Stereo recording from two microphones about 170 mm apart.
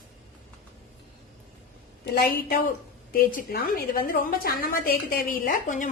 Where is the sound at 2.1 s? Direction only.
65° left (ahead or behind).